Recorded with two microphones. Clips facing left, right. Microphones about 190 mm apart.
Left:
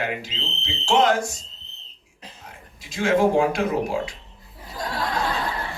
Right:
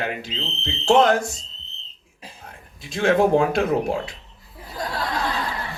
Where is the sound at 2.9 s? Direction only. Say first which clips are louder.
Right 2 dB; 60° right (ahead or behind).